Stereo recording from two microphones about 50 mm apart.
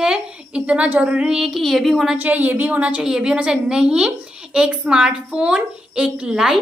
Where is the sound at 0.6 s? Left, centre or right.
Right.